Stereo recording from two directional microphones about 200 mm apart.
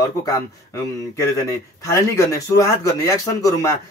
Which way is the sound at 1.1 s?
15° left (ahead or behind).